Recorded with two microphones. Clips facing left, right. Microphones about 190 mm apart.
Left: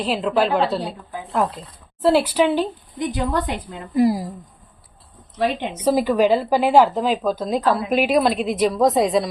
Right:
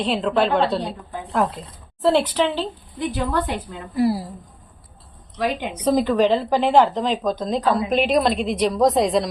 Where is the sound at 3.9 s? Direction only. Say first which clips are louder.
Left 3 dB; 15° left (ahead or behind).